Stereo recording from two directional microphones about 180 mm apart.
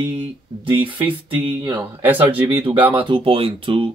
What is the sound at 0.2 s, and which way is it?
Speech, 25° right (ahead or behind).